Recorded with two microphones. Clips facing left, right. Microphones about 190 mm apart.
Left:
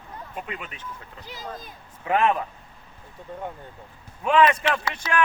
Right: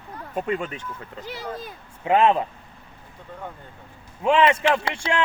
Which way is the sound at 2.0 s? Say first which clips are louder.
Right 4 dB; 25° right (ahead or behind).